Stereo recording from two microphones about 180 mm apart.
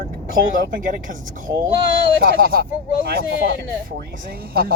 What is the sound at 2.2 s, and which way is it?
Speech, 60° right (ahead or behind).